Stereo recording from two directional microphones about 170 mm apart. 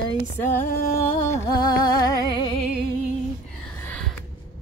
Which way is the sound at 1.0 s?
45° left (ahead or behind).